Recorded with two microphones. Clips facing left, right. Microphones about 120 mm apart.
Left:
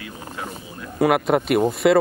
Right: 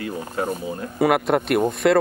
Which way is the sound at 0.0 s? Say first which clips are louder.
Right 7 dB; 45° right (ahead or behind).